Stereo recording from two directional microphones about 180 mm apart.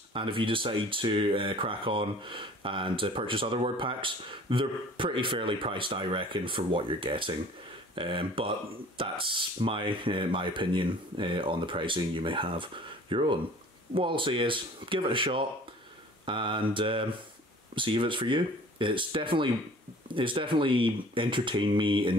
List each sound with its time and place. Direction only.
0.1 s speech: 30° right (ahead or behind)